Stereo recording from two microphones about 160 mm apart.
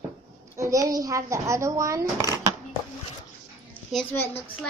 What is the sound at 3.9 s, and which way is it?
Speech, centre (ahead or behind).